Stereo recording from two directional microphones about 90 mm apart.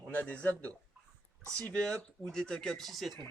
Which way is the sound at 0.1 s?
15° left (ahead or behind).